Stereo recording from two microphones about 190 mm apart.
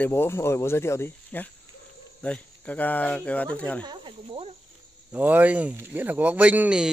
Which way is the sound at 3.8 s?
25° right (ahead or behind).